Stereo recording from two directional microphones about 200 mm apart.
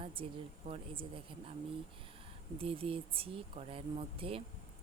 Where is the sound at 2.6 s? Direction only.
30° right (ahead or behind).